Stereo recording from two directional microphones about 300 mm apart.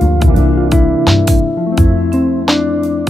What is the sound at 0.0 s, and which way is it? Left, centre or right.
Music, centre.